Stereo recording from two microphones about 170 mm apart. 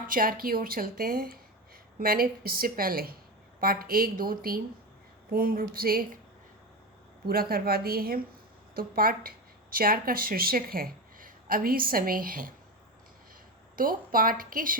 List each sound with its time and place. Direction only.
0.1 s a woman's voice: 55° right (ahead or behind)
7.3 s a woman's voice: 60° right (ahead or behind)
13.7 s a woman's voice: 55° right (ahead or behind)